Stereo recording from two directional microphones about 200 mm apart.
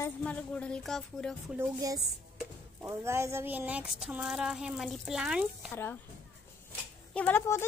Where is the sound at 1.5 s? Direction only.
15° right (ahead or behind).